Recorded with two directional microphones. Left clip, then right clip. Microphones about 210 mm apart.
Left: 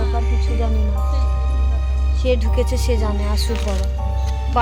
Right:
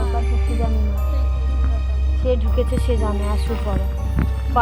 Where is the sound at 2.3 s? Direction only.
10° left (ahead or behind).